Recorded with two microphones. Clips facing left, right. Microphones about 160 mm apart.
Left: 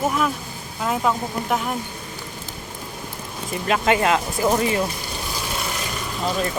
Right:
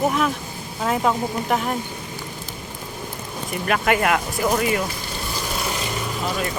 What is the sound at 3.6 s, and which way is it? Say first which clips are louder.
Speech: left 1 dB; 25° left (ahead or behind).